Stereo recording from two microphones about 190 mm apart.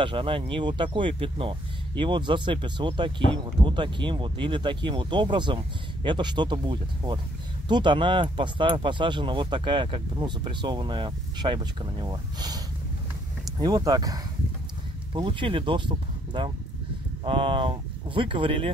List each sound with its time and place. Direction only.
0.0 s speech: 25° right (ahead or behind)